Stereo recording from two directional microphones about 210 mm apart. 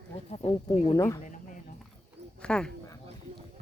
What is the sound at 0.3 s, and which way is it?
Speech, 30° left (ahead or behind).